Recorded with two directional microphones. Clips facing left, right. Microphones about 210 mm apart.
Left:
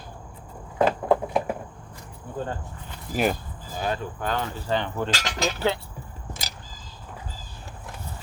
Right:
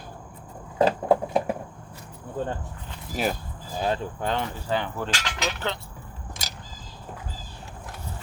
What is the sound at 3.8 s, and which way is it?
Speech, 25° right (ahead or behind).